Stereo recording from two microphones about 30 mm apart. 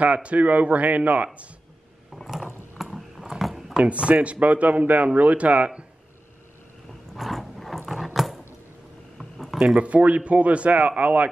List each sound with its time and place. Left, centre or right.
0.0 s speech: right
2.2 s typing: centre
3.8 s speech: right
7.2 s a sound: centre
9.8 s speech: right